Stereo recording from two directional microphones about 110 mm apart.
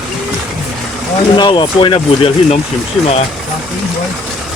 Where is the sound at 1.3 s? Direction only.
45° left (ahead or behind).